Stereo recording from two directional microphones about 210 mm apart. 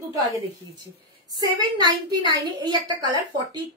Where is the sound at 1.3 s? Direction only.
20° right (ahead or behind).